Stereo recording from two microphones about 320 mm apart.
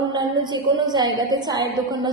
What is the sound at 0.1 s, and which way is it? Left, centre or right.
A woman's voice, centre.